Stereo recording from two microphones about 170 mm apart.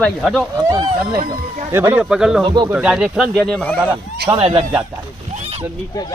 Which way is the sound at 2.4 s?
25° right (ahead or behind).